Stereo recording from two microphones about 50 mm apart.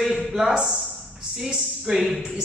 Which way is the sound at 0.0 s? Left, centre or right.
Centre.